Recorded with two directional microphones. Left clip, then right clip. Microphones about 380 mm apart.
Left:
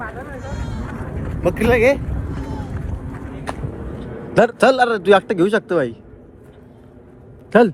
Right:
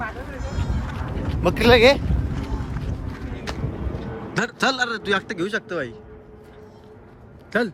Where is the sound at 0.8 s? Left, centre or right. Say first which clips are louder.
Left 1 dB; centre.